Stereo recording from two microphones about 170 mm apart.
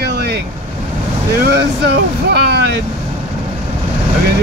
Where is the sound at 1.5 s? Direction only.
70° right (ahead or behind).